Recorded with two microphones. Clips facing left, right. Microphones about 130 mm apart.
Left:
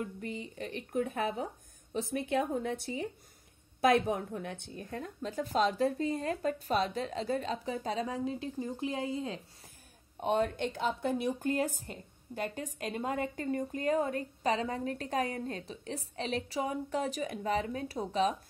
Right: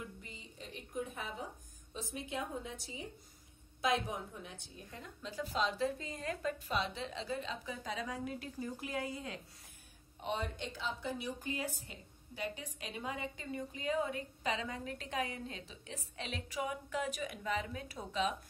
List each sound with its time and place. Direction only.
0.0 s a woman's voice: 60° left (ahead or behind); by 9.4 s 25° left (ahead or behind)
10.2 s a woman's voice: 50° left (ahead or behind); by 18.3 s 35° left (ahead or behind)